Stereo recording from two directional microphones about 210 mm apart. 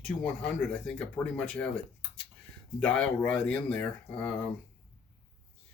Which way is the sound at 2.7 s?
5° left (ahead or behind).